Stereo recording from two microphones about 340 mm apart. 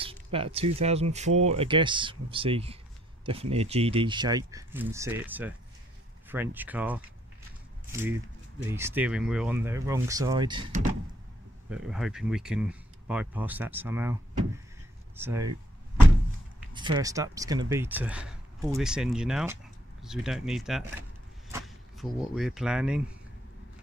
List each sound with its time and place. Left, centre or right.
0.0 s speech: centre
8.6 s speech: centre
11.7 s speech: centre
15.1 s speech: centre
16.7 s speech: centre